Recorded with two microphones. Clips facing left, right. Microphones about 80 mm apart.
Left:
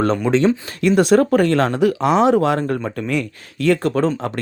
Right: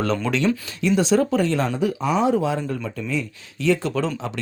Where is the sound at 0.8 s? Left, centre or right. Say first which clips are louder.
Left 5 dB; left.